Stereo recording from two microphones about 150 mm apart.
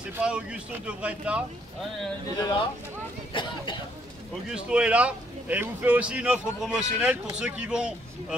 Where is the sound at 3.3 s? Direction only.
35° left (ahead or behind).